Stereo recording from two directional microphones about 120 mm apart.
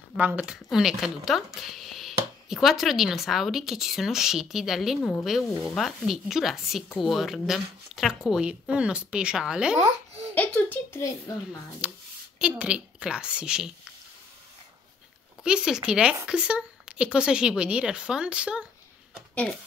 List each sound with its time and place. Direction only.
0.2 s speech: 10° right (ahead or behind)
9.8 s speech: 70° right (ahead or behind)
10.3 s a child's voice: 15° left (ahead or behind)
11.0 s a child's voice: 25° left (ahead or behind)
11.8 s speech: 15° right (ahead or behind)
15.4 s speech: 5° right (ahead or behind)